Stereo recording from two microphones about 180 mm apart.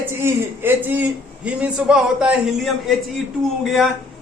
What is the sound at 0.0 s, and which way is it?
A man's voice, 10° right (ahead or behind).